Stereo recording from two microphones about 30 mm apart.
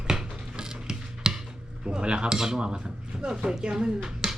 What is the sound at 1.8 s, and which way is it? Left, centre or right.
Dishes, right.